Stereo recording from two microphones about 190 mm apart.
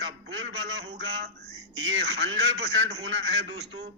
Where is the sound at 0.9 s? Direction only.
60° right (ahead or behind).